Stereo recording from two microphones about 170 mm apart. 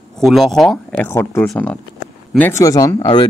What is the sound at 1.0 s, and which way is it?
Speech, 15° left (ahead or behind).